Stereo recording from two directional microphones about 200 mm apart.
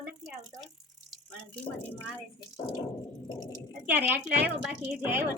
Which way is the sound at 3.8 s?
10° right (ahead or behind).